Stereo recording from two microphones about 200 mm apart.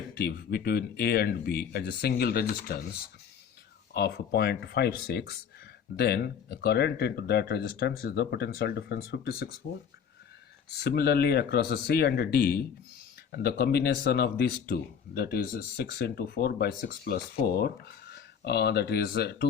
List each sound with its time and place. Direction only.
0.1 s speech: 50° left (ahead or behind)
3.9 s speech: 55° left (ahead or behind)
10.7 s speech: 55° left (ahead or behind)